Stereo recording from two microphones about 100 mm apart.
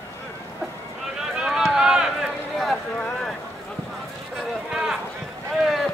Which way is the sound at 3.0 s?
15° left (ahead or behind).